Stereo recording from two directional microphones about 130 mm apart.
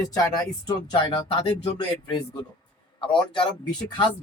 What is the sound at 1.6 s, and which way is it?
Music, 35° left (ahead or behind).